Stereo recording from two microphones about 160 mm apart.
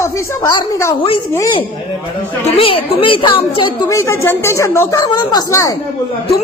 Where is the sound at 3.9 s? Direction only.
20° left (ahead or behind).